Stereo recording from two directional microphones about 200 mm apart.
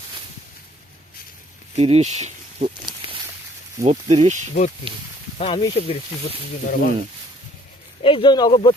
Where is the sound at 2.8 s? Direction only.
25° right (ahead or behind).